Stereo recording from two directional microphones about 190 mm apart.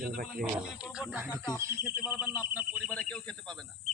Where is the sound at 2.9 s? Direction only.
5° left (ahead or behind).